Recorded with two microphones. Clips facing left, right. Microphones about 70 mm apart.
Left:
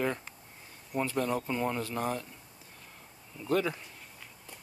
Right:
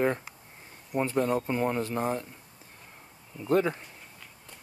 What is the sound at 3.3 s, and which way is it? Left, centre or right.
Speech, right.